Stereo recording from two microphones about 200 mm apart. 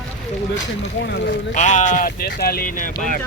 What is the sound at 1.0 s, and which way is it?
Speech, 55° left (ahead or behind).